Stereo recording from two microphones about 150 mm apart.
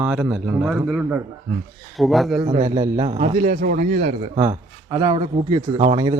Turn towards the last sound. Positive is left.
turn(degrees=-30)  # may be behind; listen again after turning